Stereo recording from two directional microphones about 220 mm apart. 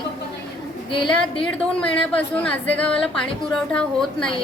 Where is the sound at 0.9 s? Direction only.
20° left (ahead or behind).